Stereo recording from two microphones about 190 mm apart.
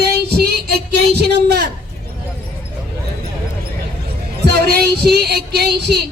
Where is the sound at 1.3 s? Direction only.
60° right (ahead or behind).